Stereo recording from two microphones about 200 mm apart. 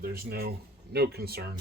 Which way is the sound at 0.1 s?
50° right (ahead or behind).